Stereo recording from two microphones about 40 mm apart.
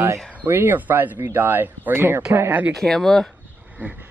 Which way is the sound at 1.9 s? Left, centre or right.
Right.